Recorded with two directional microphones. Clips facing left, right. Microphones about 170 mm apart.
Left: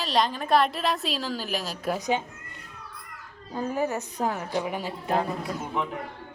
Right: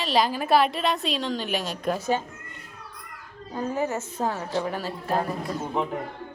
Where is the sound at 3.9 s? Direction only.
15° left (ahead or behind).